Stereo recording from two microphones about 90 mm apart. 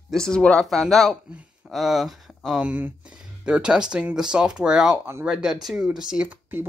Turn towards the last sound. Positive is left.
turn(degrees=-20)  # may be behind; listen again after turning